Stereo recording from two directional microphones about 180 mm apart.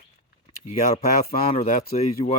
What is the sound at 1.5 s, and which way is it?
Speech, 40° left (ahead or behind).